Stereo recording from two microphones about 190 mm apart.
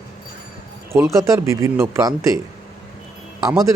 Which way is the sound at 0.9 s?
15° right (ahead or behind).